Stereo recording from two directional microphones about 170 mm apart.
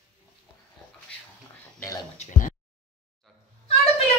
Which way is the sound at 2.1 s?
45° left (ahead or behind).